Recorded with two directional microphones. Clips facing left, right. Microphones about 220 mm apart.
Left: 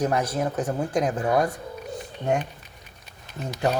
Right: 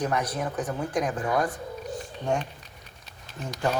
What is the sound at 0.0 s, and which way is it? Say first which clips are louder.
Speech: left 4 dB; 25° left (ahead or behind).